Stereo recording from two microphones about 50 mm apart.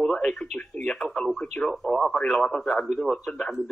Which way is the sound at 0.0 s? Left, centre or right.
Centre.